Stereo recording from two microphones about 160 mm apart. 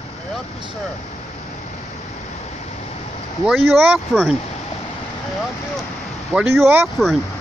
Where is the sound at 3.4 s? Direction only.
Centre (ahead or behind).